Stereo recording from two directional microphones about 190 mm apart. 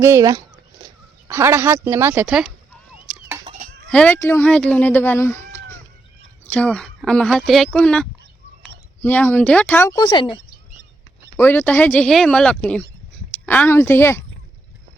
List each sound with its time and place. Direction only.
0.0 s a sound: 15° right (ahead or behind)
1.3 s speech: 15° right (ahead or behind)
3.4 s chicken: 35° right (ahead or behind)
3.8 s speech: 5° left (ahead or behind); by 10.4 s 25° left (ahead or behind)
11.3 s speech: 10° left (ahead or behind)